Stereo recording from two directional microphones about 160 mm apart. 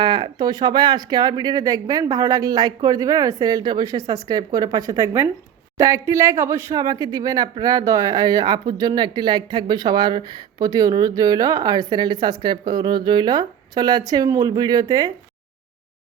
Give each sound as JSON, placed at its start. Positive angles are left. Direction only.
{"t": 0.0, "sound": "speech", "side_deg": -30}